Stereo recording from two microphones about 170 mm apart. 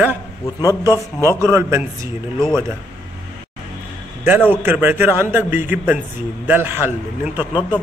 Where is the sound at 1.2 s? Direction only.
15° right (ahead or behind).